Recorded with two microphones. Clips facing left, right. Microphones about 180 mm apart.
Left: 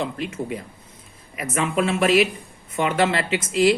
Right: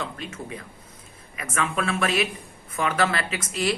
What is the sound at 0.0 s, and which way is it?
Speech, 30° left (ahead or behind).